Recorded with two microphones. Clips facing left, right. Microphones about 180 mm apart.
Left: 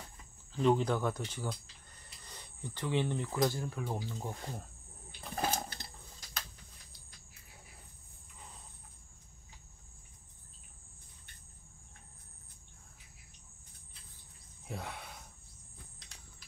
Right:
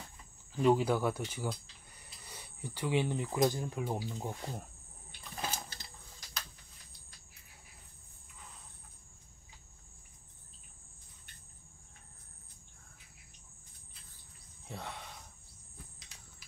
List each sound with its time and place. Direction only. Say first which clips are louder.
0.6 s speech: right 1 dB; 5° right (ahead or behind)
5.3 s sewing machine: left 6 dB; 55° left (ahead or behind)
14.7 s a sound: left 1 dB; 5° left (ahead or behind)